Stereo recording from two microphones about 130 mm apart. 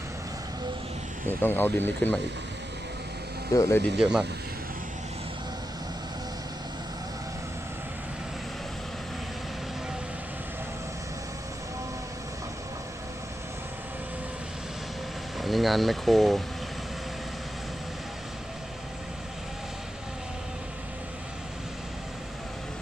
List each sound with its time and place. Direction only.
1.3 s speech: 15° left (ahead or behind)
3.5 s speech: 25° left (ahead or behind)
4.0 s speech: 5° right (ahead or behind)
15.4 s speech: centre (ahead or behind)